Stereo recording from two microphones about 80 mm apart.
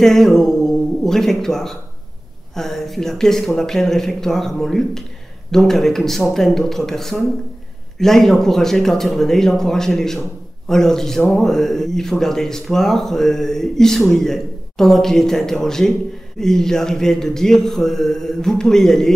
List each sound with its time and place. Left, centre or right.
0.0 s speech: centre